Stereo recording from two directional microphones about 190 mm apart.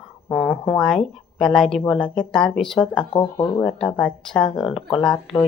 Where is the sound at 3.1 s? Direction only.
20° left (ahead or behind).